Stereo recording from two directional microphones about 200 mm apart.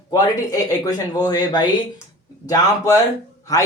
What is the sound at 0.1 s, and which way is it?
Speech, 15° left (ahead or behind).